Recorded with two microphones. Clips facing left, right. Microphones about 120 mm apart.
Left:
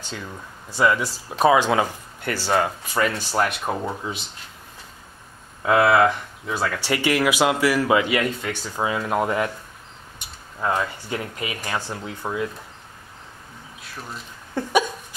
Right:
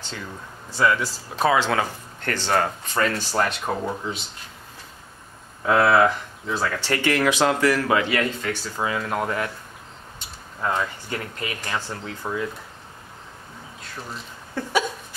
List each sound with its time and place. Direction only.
0.7 s speech: 15° left (ahead or behind)
5.7 s speech: 5° left (ahead or behind)
14.5 s a sound: 15° left (ahead or behind)